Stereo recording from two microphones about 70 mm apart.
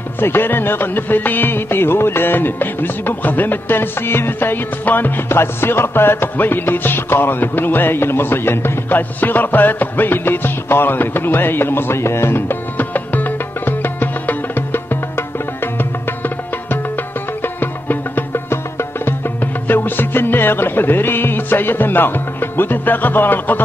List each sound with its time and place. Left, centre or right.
0.2 s music: left